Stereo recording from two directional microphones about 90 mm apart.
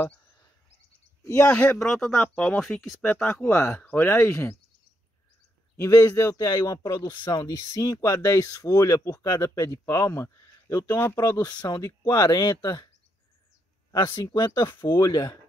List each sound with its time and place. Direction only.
0.2 s a sound: 45° left (ahead or behind)
1.4 s speech: 20° left (ahead or behind)
1.9 s speech: 10° left (ahead or behind)
2.6 s speech: centre (ahead or behind)
3.0 s speech: 20° left (ahead or behind)
5.8 s speech: 35° left (ahead or behind); by 7.4 s 55° left (ahead or behind)
7.4 s speech: 40° left (ahead or behind)
10.9 s speech: 25° left (ahead or behind)
11.4 s speech: 50° left (ahead or behind)
13.9 s speech: 65° left (ahead or behind)
14.2 s speech: 55° left (ahead or behind)
15.0 s speech: 50° left (ahead or behind)